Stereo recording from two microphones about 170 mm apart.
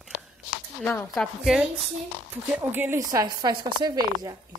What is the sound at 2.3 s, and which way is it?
Speech, 10° right (ahead or behind).